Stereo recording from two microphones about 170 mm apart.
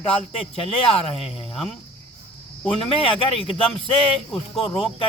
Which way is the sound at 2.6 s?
35° left (ahead or behind).